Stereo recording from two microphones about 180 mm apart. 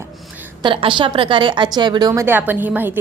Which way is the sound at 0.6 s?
30° right (ahead or behind).